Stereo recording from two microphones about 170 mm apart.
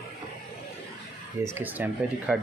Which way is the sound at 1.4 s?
15° right (ahead or behind).